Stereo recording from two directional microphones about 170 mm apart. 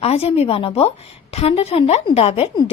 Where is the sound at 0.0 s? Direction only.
35° left (ahead or behind).